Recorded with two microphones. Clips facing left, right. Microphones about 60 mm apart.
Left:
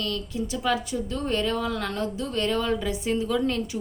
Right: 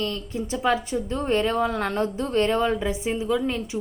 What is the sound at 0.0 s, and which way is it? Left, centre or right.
A woman's voice, right.